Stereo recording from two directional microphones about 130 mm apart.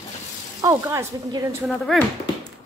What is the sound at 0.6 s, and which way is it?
Speech, 25° right (ahead or behind).